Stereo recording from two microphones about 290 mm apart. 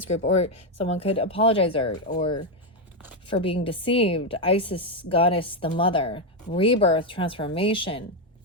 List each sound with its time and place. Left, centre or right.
0.3 s a woman's voice: left